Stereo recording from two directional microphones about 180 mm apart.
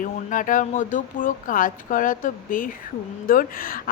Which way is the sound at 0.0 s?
45° left (ahead or behind).